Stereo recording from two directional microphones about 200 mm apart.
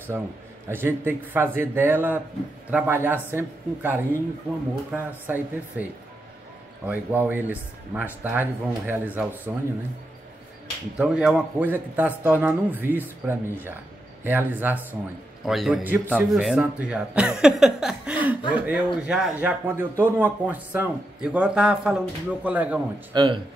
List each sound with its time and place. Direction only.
0.7 s a man's voice: 10° right (ahead or behind)
6.9 s a man's voice: 10° right (ahead or behind)
11.0 s a man's voice: 5° right (ahead or behind)
23.1 s speech: 25° right (ahead or behind)